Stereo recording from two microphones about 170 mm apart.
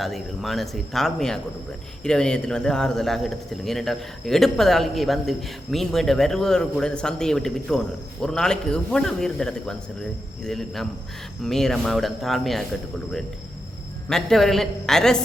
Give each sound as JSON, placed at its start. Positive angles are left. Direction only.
{"t": 0.0, "sound": "a man's voice", "side_deg": 0}
{"t": 14.1, "sound": "a man's voice", "side_deg": 0}